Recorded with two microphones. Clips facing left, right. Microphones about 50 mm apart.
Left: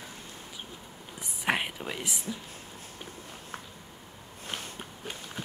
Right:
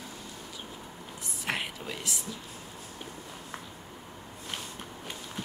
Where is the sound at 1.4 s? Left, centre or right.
Centre.